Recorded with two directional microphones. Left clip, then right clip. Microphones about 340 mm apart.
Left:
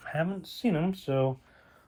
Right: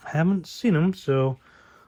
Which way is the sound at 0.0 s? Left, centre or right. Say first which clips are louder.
Right 5 dB; centre.